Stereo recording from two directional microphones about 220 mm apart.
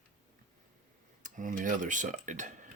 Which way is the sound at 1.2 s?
35° right (ahead or behind).